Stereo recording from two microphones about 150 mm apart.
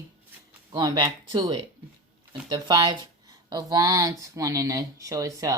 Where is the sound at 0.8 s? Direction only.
30° right (ahead or behind).